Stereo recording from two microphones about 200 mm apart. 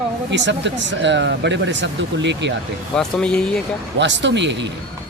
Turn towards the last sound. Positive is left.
turn(degrees=-60)  # may be behind; listen again after turning